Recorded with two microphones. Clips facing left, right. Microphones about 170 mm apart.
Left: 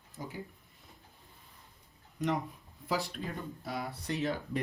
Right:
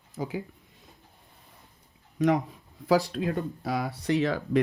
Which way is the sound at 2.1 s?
90° right.